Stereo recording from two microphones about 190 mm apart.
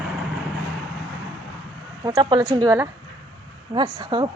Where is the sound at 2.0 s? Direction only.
20° right (ahead or behind).